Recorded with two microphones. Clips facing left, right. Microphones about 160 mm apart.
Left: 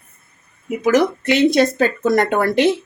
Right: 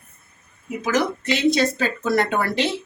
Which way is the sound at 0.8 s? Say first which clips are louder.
Left 7 dB; 55° left (ahead or behind).